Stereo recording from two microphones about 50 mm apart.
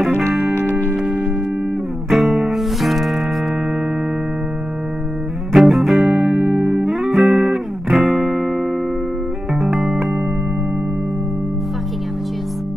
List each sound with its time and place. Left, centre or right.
0.6 s music: left
2.0 s music: centre
5.5 s music: centre